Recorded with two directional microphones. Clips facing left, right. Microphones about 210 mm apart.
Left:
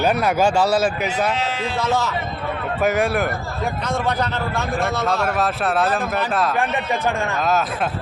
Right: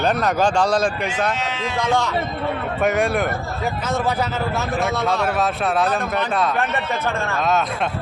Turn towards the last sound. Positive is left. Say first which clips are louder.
# even
turn(degrees=0)  # may be behind; listen again after turning